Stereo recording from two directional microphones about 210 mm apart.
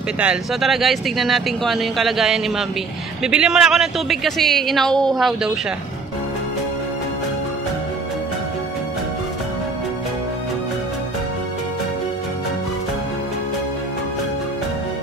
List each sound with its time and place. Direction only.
0.2 s speech: centre (ahead or behind)